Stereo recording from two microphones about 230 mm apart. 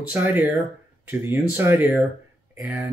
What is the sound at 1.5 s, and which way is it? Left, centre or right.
Speech, centre.